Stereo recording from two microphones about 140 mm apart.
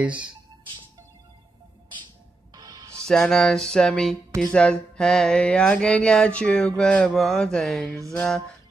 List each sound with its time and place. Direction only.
0.0 s speech: 10° right (ahead or behind)
2.5 s music: 25° right (ahead or behind)
3.1 s a sound: 5° left (ahead or behind)
7.8 s music: 25° right (ahead or behind)